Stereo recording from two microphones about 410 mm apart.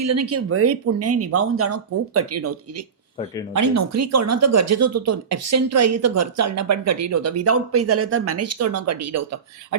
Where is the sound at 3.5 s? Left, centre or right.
Right.